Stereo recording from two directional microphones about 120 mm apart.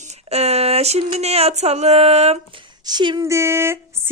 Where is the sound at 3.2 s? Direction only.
25° right (ahead or behind).